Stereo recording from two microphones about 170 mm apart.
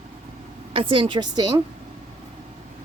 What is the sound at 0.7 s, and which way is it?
Speech, 30° right (ahead or behind).